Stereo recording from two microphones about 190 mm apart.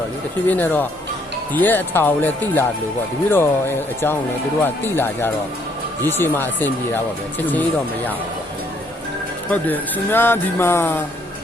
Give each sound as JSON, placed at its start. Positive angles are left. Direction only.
{"t": 0.4, "sound": "speech", "side_deg": 10}
{"t": 4.6, "sound": "speech", "side_deg": 10}
{"t": 9.5, "sound": "speech", "side_deg": 10}